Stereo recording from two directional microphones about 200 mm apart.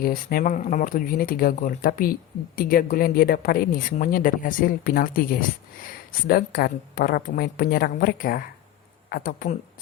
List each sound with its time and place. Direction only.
0.0 s speech: 50° left (ahead or behind)